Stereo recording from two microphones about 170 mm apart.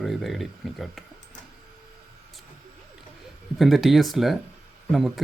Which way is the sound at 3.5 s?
Centre (ahead or behind).